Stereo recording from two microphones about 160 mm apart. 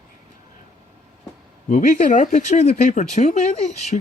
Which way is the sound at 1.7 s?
50° left (ahead or behind).